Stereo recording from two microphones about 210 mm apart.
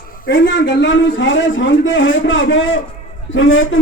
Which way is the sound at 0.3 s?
60° left (ahead or behind).